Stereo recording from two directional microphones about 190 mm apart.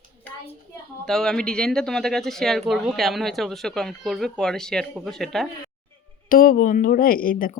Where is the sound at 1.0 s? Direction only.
Centre (ahead or behind).